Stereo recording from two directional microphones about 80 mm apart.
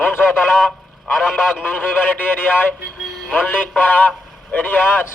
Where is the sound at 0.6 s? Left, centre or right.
Centre.